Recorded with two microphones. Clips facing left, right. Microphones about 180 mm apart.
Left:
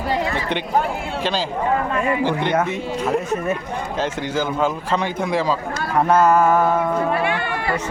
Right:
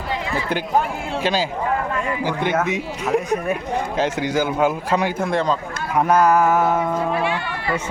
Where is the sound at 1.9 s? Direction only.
20° left (ahead or behind).